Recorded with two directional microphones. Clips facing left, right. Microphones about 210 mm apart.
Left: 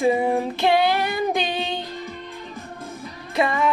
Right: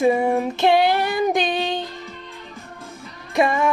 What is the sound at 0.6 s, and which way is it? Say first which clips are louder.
Child singing: right 3 dB; 20° right (ahead or behind).